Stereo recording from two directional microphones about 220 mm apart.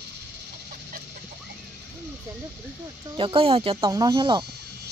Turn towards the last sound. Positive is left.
turn(degrees=-20)  # may be behind; listen again after turning